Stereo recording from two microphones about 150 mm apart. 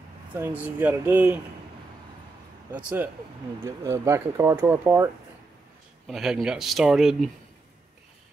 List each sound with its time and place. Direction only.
0.3 s speech: 15° right (ahead or behind)
2.7 s speech: 10° right (ahead or behind)
3.6 s speech: 20° right (ahead or behind)
6.0 s speech: centre (ahead or behind)